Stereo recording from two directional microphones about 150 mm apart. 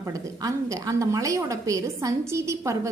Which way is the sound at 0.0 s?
25° right (ahead or behind).